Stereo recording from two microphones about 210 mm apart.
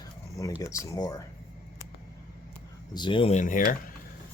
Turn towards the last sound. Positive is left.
turn(degrees=35)  # may be behind; listen again after turning